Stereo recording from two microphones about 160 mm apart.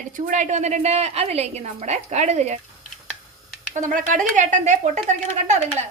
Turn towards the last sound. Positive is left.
turn(degrees=-45)  # may be behind; listen again after turning